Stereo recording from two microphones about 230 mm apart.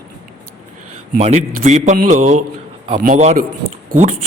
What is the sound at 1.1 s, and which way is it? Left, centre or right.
A man's voice, right.